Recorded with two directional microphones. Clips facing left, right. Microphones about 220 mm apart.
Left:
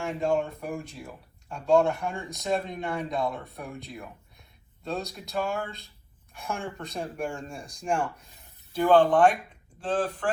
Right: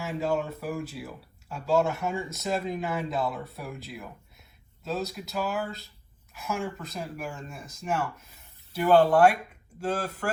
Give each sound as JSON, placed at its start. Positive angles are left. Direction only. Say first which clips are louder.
{"t": 0.0, "sound": "speech", "louder": "left 2 dB", "side_deg": -5}